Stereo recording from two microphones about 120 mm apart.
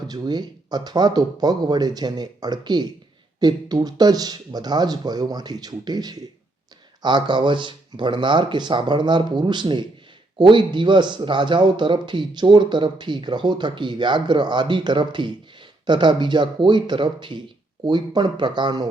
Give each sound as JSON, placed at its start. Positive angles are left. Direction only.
{"t": 0.1, "sound": "a man's voice", "side_deg": -35}